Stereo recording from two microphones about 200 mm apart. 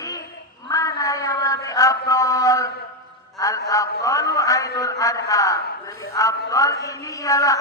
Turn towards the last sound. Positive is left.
turn(degrees=15)  # may be behind; listen again after turning